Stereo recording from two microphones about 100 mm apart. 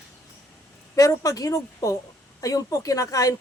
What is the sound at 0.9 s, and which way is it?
A woman's voice, 35° left (ahead or behind).